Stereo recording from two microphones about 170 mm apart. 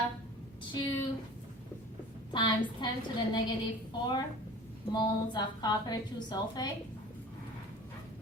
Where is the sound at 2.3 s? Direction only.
25° left (ahead or behind).